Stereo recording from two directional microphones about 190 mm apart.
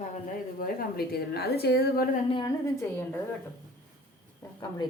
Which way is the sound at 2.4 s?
15° left (ahead or behind).